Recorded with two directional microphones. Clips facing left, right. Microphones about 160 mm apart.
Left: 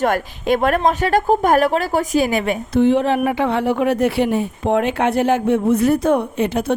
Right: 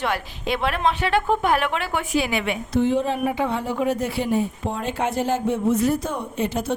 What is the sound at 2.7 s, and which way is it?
Speech, 70° left (ahead or behind).